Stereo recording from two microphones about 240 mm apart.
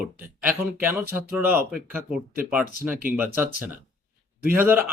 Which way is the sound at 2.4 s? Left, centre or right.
Centre.